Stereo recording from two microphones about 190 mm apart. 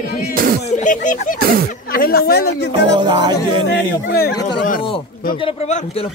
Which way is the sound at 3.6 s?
60° left (ahead or behind).